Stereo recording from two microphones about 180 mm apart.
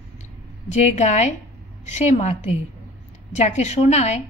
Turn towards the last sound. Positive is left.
turn(degrees=40)  # may be behind; listen again after turning